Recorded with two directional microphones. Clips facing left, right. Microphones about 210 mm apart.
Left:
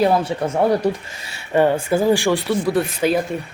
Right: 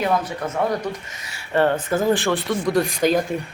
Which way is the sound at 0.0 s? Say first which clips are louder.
Left 5 dB; 30° left (ahead or behind).